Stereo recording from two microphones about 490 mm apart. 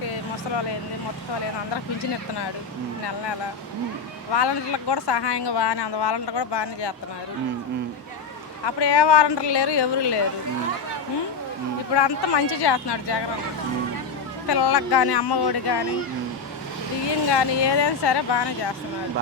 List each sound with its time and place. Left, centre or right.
4.3 s speech: left
8.6 s speech: left
11.9 s speech: left
14.4 s speech: left
17.2 s speech: left